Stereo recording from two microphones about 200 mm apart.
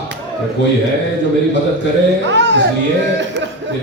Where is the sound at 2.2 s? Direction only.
60° right (ahead or behind).